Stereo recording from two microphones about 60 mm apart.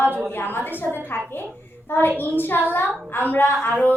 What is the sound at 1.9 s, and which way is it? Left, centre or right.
A woman's voice, left.